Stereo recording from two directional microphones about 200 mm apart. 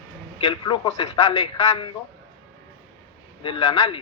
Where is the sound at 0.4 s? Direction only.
20° left (ahead or behind).